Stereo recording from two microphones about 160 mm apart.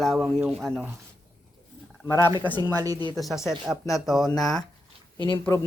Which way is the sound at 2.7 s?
20° right (ahead or behind).